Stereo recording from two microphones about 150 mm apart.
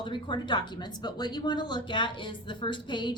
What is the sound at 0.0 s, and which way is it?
A woman's voice, 30° left (ahead or behind).